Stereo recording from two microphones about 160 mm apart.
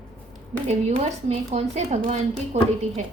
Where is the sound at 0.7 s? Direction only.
45° right (ahead or behind).